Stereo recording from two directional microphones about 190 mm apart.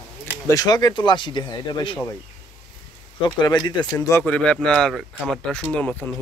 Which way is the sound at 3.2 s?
20° left (ahead or behind).